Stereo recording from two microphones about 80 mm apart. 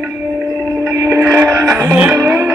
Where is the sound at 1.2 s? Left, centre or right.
Right.